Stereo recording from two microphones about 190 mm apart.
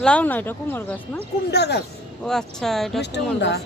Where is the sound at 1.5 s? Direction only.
60° left (ahead or behind).